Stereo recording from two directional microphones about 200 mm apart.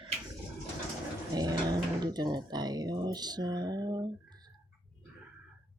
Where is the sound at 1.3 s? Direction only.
20° right (ahead or behind).